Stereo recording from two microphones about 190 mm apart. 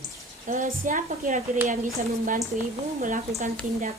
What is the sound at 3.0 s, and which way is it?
Speech, 45° right (ahead or behind).